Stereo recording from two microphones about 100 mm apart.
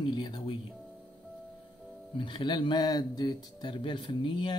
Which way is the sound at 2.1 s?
55° left (ahead or behind).